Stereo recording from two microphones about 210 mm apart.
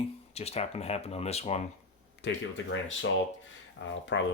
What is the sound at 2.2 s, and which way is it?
Speech, 55° left (ahead or behind).